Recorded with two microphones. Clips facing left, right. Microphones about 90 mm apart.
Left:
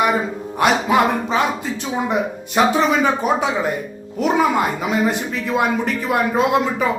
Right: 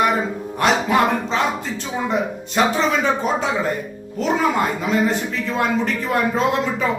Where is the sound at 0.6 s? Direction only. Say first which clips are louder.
Left 1 dB; 10° left (ahead or behind).